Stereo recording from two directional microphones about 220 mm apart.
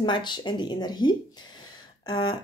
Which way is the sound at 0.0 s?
20° left (ahead or behind).